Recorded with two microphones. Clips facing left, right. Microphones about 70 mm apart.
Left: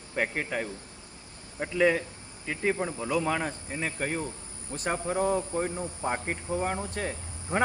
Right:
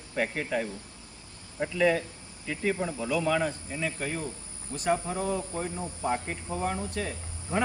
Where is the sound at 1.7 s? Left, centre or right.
Left.